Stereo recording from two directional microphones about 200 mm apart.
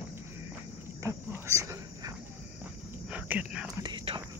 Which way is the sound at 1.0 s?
15° right (ahead or behind).